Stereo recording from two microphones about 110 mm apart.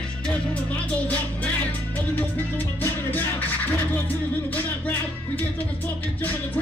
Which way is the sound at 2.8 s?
20° left (ahead or behind).